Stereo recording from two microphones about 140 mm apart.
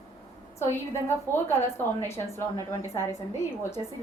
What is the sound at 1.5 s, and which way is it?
A woman's voice, 20° left (ahead or behind).